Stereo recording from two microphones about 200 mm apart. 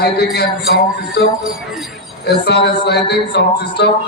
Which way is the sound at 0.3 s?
55° left (ahead or behind).